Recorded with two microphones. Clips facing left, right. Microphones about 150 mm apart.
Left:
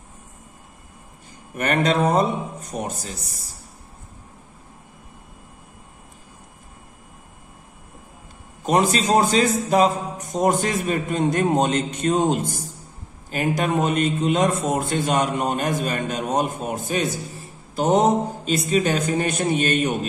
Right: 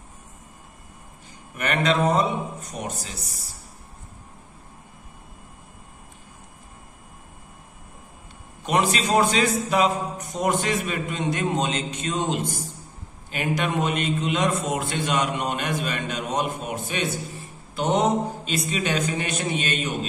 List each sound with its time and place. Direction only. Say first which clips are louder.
1.5 s a man's voice: left 3 dB; 45° left (ahead or behind)
8.6 s a man's voice: left 4 dB; 40° left (ahead or behind)